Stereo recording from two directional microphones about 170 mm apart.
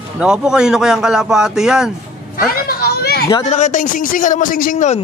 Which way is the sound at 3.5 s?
45° left (ahead or behind).